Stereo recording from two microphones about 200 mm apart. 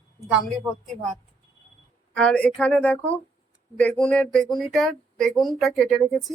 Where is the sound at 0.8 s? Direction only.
35° right (ahead or behind).